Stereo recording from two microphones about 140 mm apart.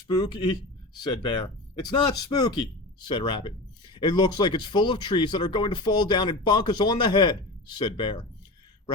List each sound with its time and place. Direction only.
0.1 s speech: 30° left (ahead or behind)